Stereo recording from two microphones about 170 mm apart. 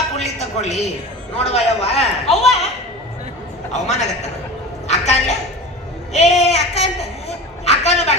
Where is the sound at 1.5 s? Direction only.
35° left (ahead or behind).